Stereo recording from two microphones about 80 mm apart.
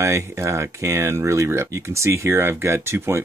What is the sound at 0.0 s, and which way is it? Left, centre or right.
Speech, right.